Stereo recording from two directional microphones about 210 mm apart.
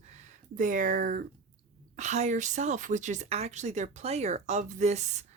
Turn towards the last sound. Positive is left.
turn(degrees=-35)  # may be behind; listen again after turning